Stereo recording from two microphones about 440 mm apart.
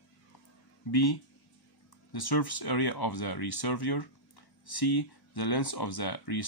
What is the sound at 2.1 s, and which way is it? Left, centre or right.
Speech, left.